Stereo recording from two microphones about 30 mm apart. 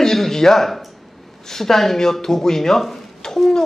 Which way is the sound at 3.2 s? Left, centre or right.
Left.